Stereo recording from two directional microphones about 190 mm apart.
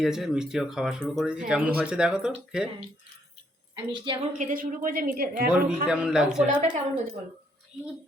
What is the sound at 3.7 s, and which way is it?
Speech, 25° right (ahead or behind).